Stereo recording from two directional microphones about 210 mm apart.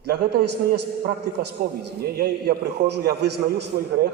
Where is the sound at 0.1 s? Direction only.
45° right (ahead or behind).